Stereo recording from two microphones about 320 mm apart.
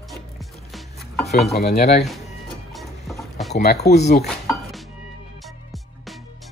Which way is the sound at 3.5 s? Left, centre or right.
Left.